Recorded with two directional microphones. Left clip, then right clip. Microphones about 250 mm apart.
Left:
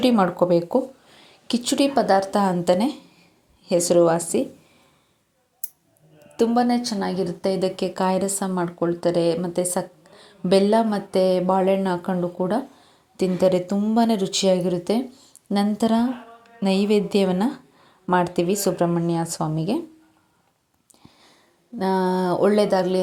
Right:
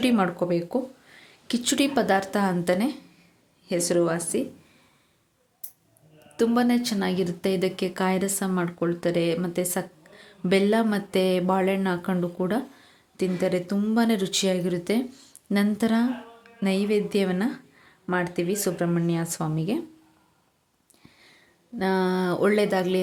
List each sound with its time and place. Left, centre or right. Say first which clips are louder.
0.0 s speech: left 5 dB; centre
0.7 s a sound: left 6 dB; centre
2.1 s speech: left 5 dB; centre
6.3 s a woman's voice: left 3 dB; centre
6.7 s speech: left 2 dB; centre
7.0 s speech: left 2 dB; centre
13.1 s speech: left 6 dB; centre
21.0 s a sound: left 1 dB; centre
21.8 s speech: left 3 dB; centre